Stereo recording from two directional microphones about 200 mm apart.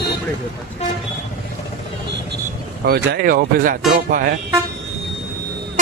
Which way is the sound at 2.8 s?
50° right (ahead or behind).